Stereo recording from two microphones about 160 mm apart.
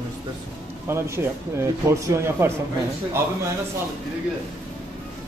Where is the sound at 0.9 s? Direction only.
15° right (ahead or behind).